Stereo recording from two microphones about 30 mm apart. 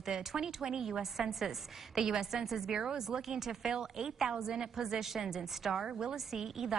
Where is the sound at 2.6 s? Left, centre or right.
Right.